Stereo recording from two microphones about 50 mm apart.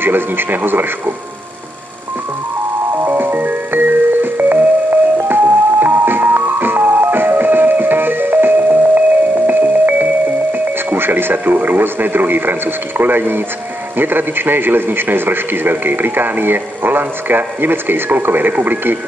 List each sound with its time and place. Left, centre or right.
0.0 s a man's voice: right
3.1 s music: right
10.5 s a man's voice: right